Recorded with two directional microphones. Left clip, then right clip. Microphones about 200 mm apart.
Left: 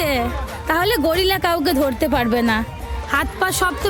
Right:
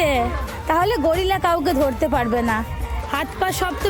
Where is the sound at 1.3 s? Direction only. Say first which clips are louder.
Left 1 dB; 35° left (ahead or behind).